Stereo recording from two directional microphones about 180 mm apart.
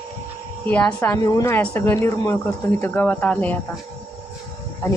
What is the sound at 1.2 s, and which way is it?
Speech, 20° left (ahead or behind).